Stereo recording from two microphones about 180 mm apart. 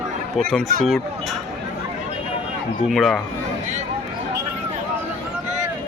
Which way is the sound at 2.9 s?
Centre (ahead or behind).